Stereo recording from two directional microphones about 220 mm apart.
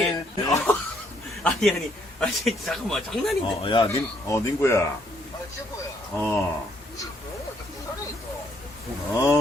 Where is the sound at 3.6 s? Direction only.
20° left (ahead or behind).